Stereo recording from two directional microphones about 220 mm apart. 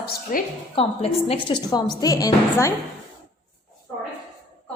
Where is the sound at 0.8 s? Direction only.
25° left (ahead or behind).